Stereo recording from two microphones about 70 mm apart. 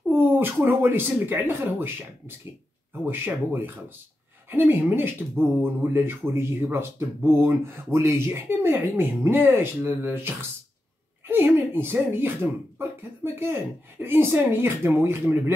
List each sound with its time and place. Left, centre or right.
0.1 s speech: right